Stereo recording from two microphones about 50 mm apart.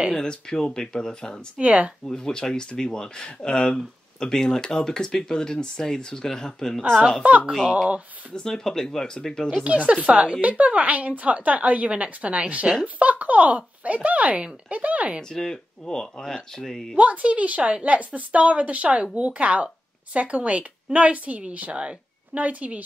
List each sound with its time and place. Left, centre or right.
0.2 s speech: centre
1.6 s speech: right
2.0 s speech: centre
7.2 s speech: right
8.4 s speech: centre
9.6 s speech: right
15.2 s speech: centre
16.9 s speech: right